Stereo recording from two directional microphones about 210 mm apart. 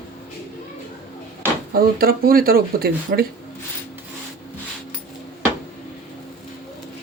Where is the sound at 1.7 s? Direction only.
45° right (ahead or behind).